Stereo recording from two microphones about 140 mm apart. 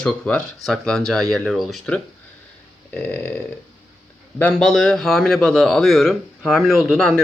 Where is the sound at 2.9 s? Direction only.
15° left (ahead or behind).